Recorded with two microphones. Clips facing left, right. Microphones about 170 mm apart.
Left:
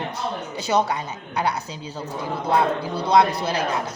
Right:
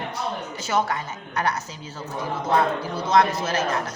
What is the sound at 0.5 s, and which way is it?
Speech, 15° left (ahead or behind).